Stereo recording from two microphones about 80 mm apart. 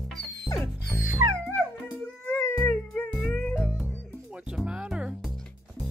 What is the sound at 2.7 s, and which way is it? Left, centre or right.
Music, centre.